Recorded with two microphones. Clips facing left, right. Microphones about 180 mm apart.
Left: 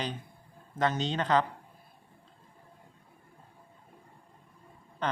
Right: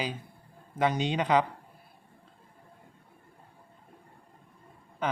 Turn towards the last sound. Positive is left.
turn(degrees=-10)  # may be behind; listen again after turning